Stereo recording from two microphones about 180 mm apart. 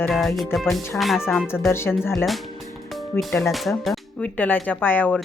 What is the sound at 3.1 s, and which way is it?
Speech, 15° left (ahead or behind).